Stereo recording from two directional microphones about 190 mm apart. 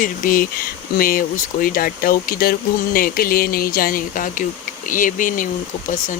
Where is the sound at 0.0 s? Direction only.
45° left (ahead or behind).